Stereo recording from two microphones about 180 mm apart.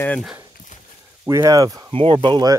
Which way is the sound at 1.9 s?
30° right (ahead or behind).